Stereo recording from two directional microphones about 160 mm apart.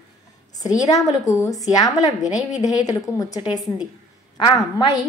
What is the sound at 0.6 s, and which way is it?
A woman's voice, 25° left (ahead or behind).